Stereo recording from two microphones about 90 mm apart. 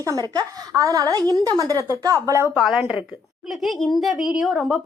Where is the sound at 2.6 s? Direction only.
5° right (ahead or behind).